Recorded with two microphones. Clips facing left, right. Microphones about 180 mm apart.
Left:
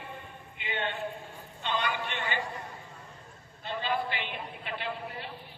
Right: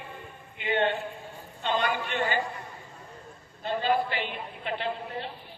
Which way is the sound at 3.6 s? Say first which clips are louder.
Right 6 dB; 45° right (ahead or behind).